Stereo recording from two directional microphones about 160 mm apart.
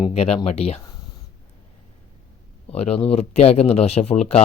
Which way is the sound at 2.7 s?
40° left (ahead or behind).